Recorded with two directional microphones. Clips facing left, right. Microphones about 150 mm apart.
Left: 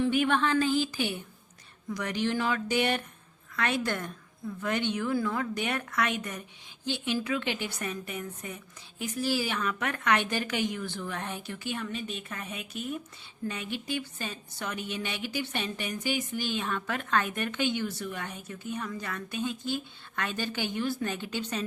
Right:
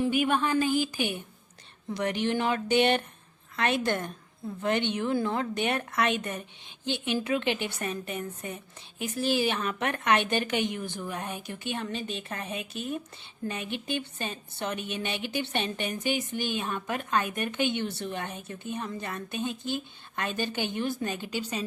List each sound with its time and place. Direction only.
0.0 s a woman's voice: 10° right (ahead or behind)
1.9 s a woman's voice: 25° right (ahead or behind)